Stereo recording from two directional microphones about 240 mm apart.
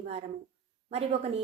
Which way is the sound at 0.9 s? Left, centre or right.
Right.